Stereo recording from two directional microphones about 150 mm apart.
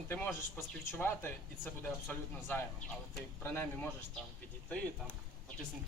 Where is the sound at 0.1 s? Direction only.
15° left (ahead or behind).